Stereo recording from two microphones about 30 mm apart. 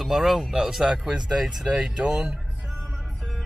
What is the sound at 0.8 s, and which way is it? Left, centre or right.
Speech, right.